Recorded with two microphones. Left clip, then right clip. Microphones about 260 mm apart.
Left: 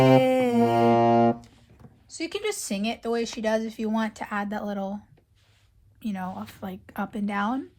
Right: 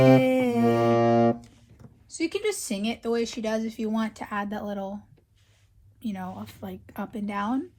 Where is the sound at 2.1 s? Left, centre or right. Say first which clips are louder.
Right 2 dB; left.